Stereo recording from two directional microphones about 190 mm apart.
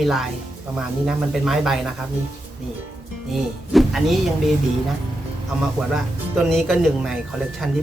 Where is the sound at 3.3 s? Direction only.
Centre (ahead or behind).